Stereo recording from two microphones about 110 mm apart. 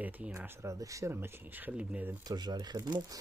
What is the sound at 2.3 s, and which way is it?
Speech, 40° right (ahead or behind).